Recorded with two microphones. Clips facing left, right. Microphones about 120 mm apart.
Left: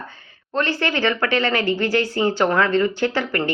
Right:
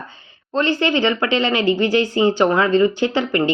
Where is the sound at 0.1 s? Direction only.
20° right (ahead or behind).